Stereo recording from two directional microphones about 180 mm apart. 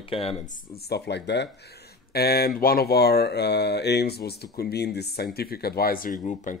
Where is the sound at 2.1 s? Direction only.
60° left (ahead or behind).